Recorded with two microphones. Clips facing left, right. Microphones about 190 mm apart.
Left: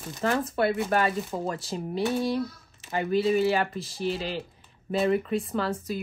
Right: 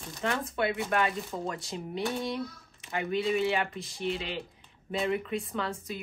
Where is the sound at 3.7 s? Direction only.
5° left (ahead or behind).